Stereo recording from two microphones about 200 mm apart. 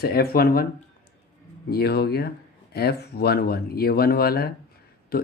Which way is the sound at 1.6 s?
50° left (ahead or behind).